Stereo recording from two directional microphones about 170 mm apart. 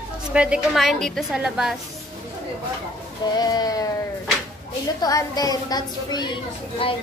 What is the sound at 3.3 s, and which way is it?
Speech, 20° left (ahead or behind).